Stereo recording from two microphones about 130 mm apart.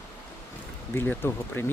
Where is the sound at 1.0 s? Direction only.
15° left (ahead or behind).